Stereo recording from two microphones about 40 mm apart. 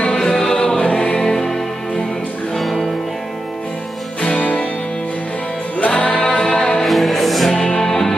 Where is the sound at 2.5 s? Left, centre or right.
Centre.